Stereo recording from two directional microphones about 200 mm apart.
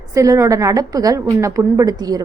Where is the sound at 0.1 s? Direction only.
15° right (ahead or behind).